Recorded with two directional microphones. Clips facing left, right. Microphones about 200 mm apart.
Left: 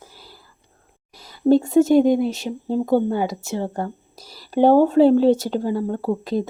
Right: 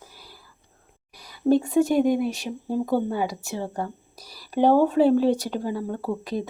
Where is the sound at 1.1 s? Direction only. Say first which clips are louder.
Left 4 dB; 25° left (ahead or behind).